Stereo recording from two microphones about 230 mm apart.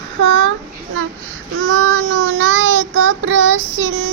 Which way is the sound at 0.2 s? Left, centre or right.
Right.